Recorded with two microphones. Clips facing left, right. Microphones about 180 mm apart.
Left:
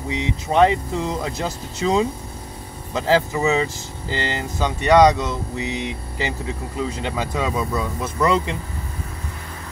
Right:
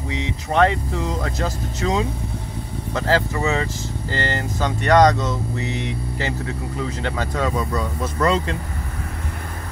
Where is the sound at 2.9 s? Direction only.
15° left (ahead or behind).